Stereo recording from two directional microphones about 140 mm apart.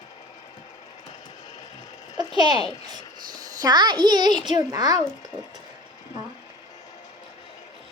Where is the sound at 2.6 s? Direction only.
40° left (ahead or behind).